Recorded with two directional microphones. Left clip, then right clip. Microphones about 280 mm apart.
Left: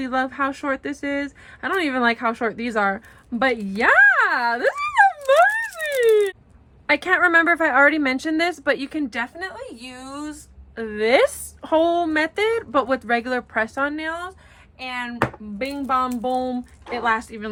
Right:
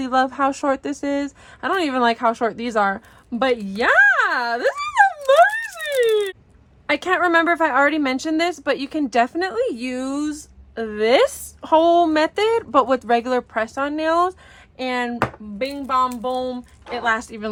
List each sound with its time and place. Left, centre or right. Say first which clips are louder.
0.0 s a woman's voice: right 4 dB; centre
9.9 s speech: right 10 dB; right
10.8 s a woman's voice: right 1 dB; centre
15.2 s a woman's voice: right 1 dB; centre